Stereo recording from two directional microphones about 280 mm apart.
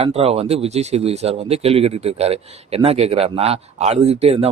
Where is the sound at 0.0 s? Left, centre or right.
Right.